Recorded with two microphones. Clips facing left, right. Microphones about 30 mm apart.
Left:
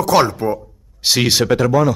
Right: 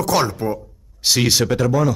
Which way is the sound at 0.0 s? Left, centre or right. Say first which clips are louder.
Left 4 dB; left.